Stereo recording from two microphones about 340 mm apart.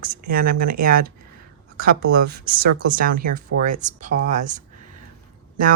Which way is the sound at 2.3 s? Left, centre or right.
Right.